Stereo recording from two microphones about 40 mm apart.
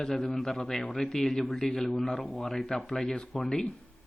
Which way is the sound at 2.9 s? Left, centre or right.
Left.